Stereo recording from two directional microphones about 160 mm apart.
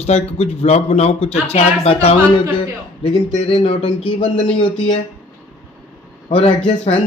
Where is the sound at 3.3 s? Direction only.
35° left (ahead or behind).